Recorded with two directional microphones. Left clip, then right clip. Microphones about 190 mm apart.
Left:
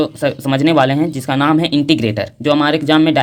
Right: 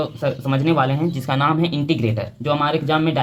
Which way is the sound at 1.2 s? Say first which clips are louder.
Left 3 dB; 35° left (ahead or behind).